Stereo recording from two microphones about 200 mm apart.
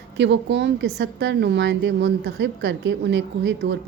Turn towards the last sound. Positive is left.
turn(degrees=-60)  # may be behind; listen again after turning